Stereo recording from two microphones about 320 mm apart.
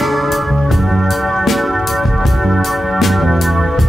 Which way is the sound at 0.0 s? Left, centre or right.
Centre.